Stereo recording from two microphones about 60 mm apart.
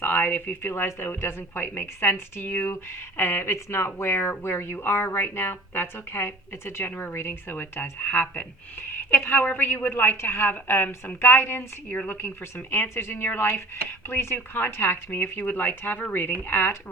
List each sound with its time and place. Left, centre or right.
0.0 s a woman's voice: left
0.7 s a woman's voice: left